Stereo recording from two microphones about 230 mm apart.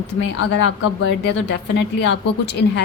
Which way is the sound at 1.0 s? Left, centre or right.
Left.